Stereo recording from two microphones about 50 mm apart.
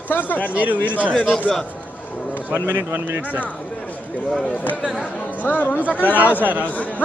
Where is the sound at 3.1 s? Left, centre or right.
Right.